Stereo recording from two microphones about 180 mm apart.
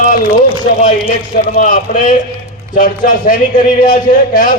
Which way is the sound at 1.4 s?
50° left (ahead or behind).